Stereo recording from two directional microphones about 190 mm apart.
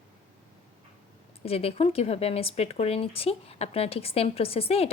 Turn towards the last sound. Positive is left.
turn(degrees=30)  # may be behind; listen again after turning